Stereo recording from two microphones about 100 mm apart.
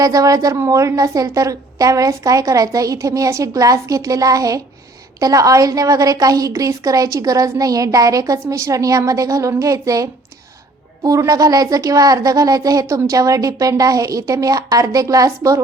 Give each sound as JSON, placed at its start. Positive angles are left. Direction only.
{"t": 0.0, "sound": "a woman's voice", "side_deg": -35}